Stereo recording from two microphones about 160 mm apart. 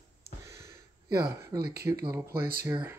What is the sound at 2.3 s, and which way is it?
Speech, 70° right (ahead or behind).